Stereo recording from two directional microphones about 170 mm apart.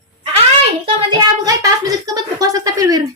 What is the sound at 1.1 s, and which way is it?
Speech, 25° right (ahead or behind).